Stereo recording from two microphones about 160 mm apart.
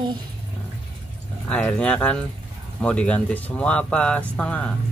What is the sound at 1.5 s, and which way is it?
Speech, 5° left (ahead or behind).